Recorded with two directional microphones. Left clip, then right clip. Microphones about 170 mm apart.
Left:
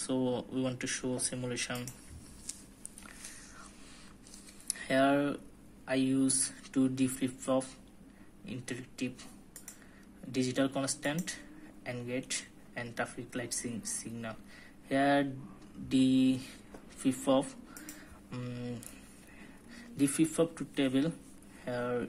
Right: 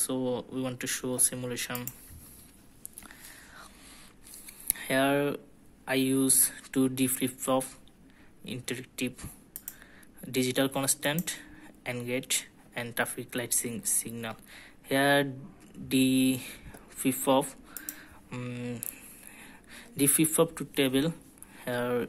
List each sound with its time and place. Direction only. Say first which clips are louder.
0.0 s speech: right 2 dB; 20° right (ahead or behind)
4.7 s speech: right 2 dB; 25° right (ahead or behind)
8.5 s speech: right 5 dB; 35° right (ahead or behind)
10.3 s speech: right 4 dB; 35° right (ahead or behind)